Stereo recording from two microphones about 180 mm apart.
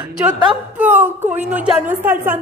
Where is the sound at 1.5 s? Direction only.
10° right (ahead or behind).